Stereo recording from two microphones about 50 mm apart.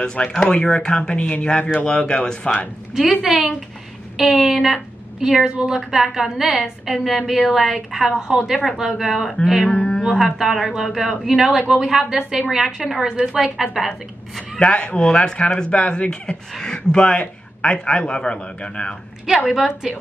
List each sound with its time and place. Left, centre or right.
0.0 s a man's voice: centre
2.9 s a woman's voice: centre
9.7 s mantra: left
10.1 s a woman's voice: centre
14.6 s a man's voice: left
19.5 s a woman's voice: centre